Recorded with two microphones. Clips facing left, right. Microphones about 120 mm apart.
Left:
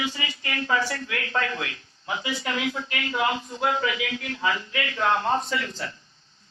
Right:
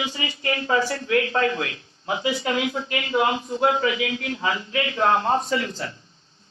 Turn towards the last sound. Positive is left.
turn(degrees=-35)  # may be behind; listen again after turning